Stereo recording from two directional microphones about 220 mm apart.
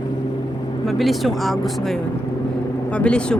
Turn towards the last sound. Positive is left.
turn(degrees=5)  # may be behind; listen again after turning